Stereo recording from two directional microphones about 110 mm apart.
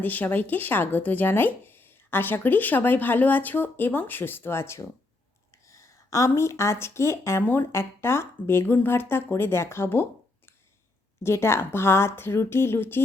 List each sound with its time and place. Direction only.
0.0 s a woman's voice: 15° left (ahead or behind)